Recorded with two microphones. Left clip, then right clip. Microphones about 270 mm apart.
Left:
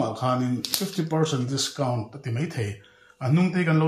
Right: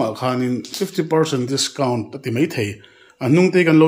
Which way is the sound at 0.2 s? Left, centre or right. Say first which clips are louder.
Right 4 dB; right.